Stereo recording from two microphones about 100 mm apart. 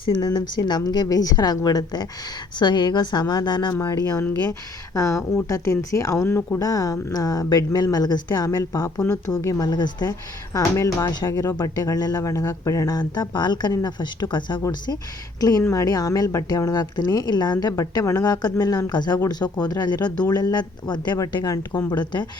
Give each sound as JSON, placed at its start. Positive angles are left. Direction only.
{"t": 0.0, "sound": "speech", "side_deg": 45}
{"t": 3.7, "sound": "speech", "side_deg": 35}
{"t": 6.6, "sound": "speech", "side_deg": 35}